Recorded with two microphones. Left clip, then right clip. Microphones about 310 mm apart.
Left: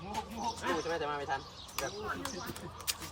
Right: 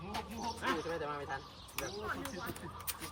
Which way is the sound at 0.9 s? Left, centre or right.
Left.